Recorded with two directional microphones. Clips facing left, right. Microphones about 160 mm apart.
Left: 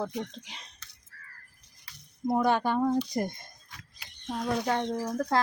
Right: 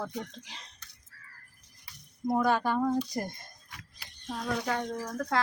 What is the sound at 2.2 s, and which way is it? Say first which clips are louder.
Speech: left 1 dB; 20° left (ahead or behind).